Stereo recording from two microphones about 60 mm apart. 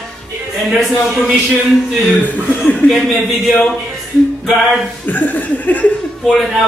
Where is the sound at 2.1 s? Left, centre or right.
Left.